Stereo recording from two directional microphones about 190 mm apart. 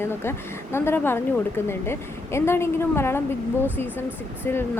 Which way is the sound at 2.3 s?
15° left (ahead or behind).